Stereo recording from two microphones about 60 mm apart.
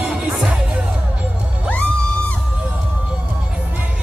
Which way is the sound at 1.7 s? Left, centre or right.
Left.